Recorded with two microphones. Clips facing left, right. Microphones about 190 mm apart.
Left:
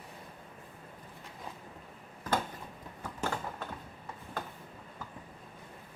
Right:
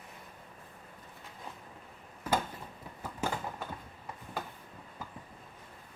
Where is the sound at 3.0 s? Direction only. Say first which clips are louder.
Even; 10° right (ahead or behind).